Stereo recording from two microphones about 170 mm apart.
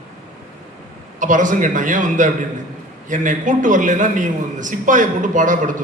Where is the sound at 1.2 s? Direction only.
50° right (ahead or behind).